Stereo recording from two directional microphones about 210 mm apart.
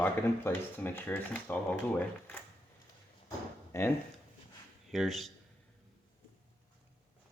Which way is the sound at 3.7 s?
15° left (ahead or behind).